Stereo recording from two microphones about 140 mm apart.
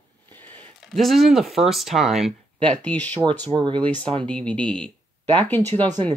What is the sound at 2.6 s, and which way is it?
Speech, 10° left (ahead or behind).